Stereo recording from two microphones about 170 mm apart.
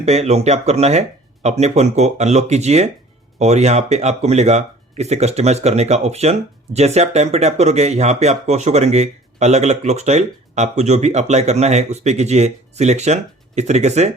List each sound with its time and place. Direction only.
0.0 s speech: 40° right (ahead or behind)